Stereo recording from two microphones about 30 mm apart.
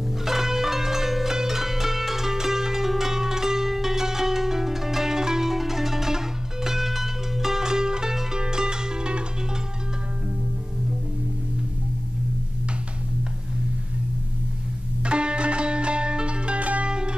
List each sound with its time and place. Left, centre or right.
0.2 s music: centre; by 9.2 s right
15.0 s music: right
16.8 s music: right